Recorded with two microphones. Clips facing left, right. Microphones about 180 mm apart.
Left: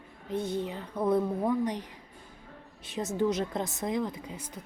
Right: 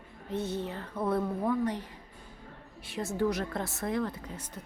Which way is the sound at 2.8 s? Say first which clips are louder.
Left 2 dB; 20° left (ahead or behind).